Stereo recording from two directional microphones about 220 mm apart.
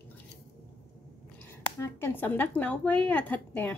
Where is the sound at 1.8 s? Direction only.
10° left (ahead or behind).